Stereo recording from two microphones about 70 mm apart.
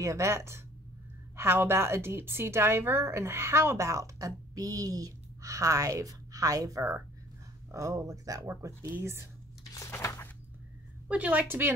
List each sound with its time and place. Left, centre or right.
0.0 s a woman's voice: right
11.1 s a woman's voice: right